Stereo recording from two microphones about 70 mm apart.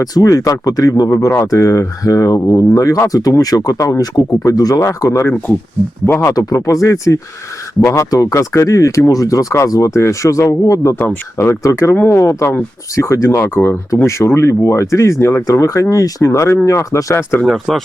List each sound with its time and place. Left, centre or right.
0.0 s speech: left
1.3 s speech: left
6.2 s speech: left
10.9 s speech: left
11.3 s speech: left
17.4 s speech: centre